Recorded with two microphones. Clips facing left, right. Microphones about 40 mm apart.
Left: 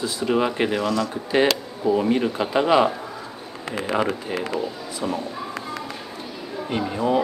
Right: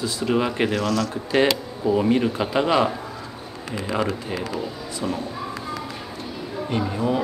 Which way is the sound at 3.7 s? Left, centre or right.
Left.